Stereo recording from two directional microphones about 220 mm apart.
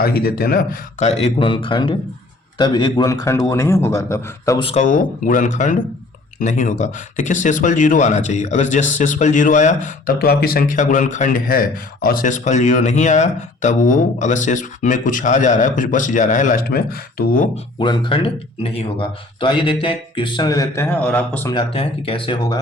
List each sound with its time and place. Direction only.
0.0 s a man's voice: 45° left (ahead or behind); by 4.6 s 15° left (ahead or behind)
4.6 s speech: 30° left (ahead or behind)
17.7 s a man's voice: 20° left (ahead or behind)
21.5 s a man's voice: 25° left (ahead or behind)